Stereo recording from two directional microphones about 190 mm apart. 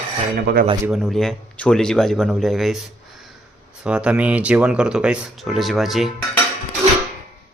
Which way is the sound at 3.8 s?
5° right (ahead or behind).